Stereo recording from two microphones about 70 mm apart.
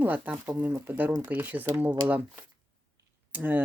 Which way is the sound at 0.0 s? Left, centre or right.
Right.